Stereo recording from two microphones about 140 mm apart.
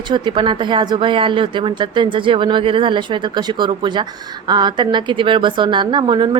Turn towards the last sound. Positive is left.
turn(degrees=-35)  # may be behind; listen again after turning